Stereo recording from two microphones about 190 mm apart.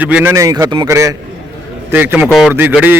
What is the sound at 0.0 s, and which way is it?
A man's voice, 10° right (ahead or behind).